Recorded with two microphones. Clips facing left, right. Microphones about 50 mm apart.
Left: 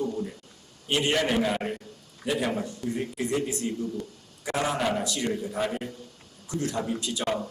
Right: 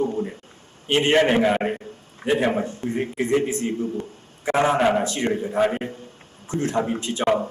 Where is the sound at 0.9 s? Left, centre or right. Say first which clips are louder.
Right 7 dB; right.